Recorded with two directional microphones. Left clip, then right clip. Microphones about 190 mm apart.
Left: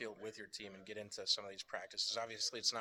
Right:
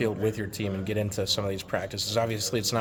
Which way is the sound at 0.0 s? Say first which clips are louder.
Right 19 dB; 10° left (ahead or behind).